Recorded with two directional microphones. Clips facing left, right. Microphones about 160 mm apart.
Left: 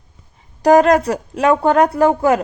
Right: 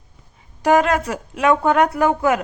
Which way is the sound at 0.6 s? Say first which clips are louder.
Left 5 dB; 40° left (ahead or behind).